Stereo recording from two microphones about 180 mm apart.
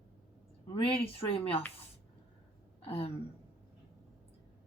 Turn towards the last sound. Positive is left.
turn(degrees=30)  # may be behind; listen again after turning